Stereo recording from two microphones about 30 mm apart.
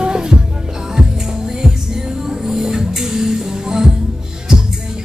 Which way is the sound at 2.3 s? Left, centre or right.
Centre.